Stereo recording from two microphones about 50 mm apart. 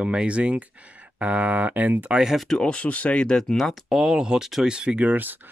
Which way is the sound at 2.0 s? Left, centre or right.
Centre.